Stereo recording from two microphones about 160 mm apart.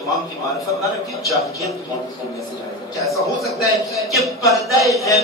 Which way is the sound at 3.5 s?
Centre (ahead or behind).